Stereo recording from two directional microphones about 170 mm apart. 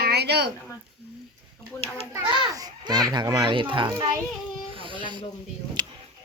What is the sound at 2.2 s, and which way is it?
A child's voice, 30° right (ahead or behind).